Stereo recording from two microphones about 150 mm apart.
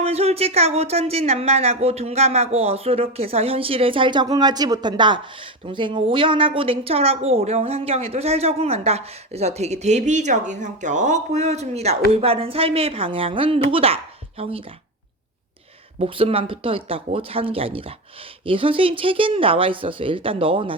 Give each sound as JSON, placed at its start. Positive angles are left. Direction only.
{"t": 0.0, "sound": "a woman's voice", "side_deg": -40}
{"t": 16.0, "sound": "speech", "side_deg": -40}